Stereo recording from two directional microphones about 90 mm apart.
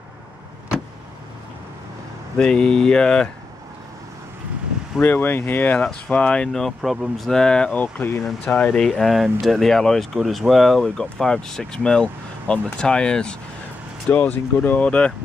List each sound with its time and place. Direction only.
2.3 s speech: 10° left (ahead or behind)
5.0 s speech: 25° left (ahead or behind)
7.8 s speech: 25° left (ahead or behind)
8.7 s speech: 5° left (ahead or behind)
14.1 s speech: 20° left (ahead or behind)